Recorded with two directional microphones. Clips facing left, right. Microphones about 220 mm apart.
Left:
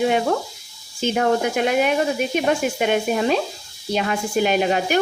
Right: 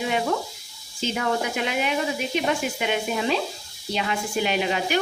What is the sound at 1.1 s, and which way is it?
Sizzle, 50° left (ahead or behind).